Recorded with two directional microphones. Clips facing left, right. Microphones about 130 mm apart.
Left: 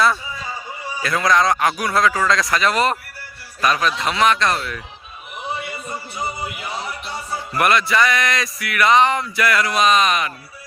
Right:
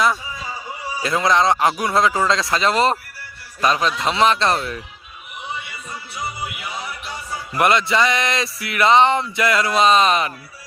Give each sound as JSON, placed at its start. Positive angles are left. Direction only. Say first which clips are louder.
{"t": 1.0, "sound": "speech", "louder": "even", "side_deg": -25}
{"t": 5.6, "sound": "music", "louder": "left 5 dB", "side_deg": 40}
{"t": 7.5, "sound": "speech", "louder": "right 1 dB", "side_deg": -25}